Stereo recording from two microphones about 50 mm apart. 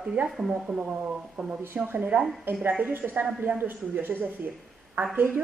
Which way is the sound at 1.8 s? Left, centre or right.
Right.